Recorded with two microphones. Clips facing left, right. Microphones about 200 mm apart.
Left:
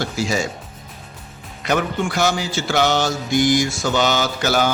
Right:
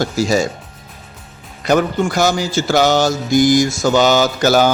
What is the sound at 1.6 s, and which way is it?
A man's voice, 40° right (ahead or behind).